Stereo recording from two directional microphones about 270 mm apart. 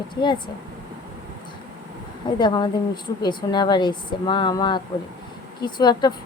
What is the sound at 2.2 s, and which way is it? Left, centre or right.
A woman's voice, centre.